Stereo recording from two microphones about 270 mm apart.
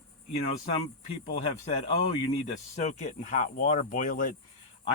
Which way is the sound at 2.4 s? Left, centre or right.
Left.